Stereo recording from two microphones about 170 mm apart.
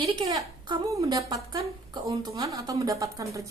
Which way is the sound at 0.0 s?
25° right (ahead or behind).